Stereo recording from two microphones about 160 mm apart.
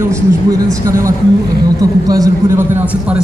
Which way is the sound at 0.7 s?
20° right (ahead or behind).